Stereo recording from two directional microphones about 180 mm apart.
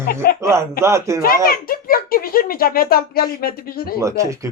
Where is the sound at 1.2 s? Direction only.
55° left (ahead or behind).